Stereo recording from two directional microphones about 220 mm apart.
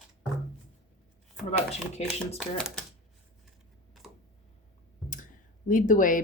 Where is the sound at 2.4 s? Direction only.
Centre (ahead or behind).